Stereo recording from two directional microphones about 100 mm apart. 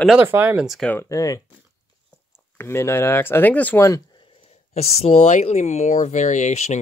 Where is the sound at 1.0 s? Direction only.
35° left (ahead or behind).